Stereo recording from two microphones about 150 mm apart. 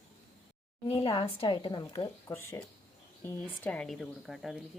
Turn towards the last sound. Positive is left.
turn(degrees=0)  # may be behind; listen again after turning